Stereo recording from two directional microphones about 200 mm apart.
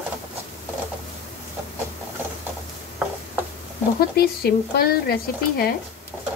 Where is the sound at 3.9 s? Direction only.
50° left (ahead or behind).